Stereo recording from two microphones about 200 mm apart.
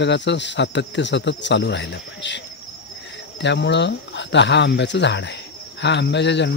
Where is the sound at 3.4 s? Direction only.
60° left (ahead or behind).